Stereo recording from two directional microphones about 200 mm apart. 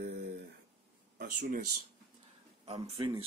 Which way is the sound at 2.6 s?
30° right (ahead or behind).